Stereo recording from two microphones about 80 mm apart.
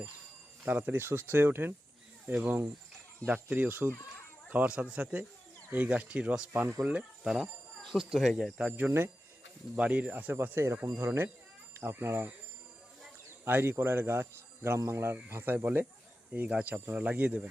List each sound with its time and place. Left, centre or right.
0.6 s speech: right
2.2 s speech: centre
6.5 s speech: right
7.3 s speech: centre
8.7 s speech: right
9.7 s speech: centre
10.3 s speech: right
13.4 s speech: right